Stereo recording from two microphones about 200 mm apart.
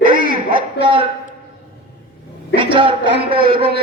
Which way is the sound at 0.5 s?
25° right (ahead or behind).